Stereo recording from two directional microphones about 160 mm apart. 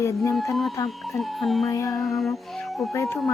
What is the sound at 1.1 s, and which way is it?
Music, centre (ahead or behind).